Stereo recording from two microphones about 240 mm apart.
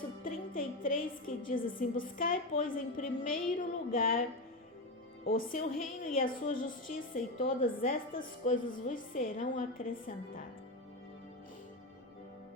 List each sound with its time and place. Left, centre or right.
0.3 s a woman's voice: left
5.2 s a woman's voice: left
5.5 s a woman's voice: left